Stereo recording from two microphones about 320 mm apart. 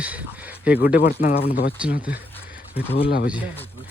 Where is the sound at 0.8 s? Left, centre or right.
Left.